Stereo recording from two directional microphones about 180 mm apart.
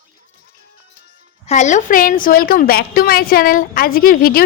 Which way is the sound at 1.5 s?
40° left (ahead or behind).